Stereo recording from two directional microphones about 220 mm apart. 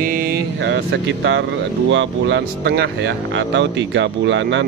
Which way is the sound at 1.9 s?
55° right (ahead or behind).